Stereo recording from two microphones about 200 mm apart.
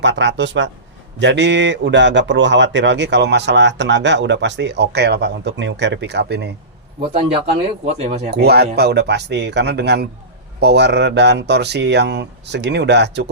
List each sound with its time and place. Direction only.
0.0 s a man's voice: 60° right (ahead or behind)
7.9 s speech: 35° right (ahead or behind)
8.3 s a man's voice: 55° right (ahead or behind)